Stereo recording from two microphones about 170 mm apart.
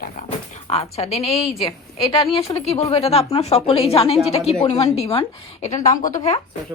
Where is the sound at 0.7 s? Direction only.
35° left (ahead or behind).